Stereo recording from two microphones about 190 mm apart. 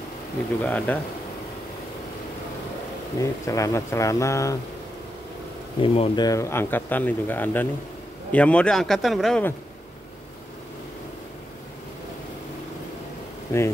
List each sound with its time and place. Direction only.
0.7 s speech: 10° left (ahead or behind)
3.2 s speech: 15° left (ahead or behind)
5.8 s speech: 30° left (ahead or behind); by 9.5 s centre (ahead or behind)
13.5 s speech: 15° left (ahead or behind)